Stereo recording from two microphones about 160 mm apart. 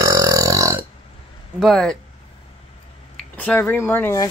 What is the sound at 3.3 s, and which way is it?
Speech, 10° left (ahead or behind).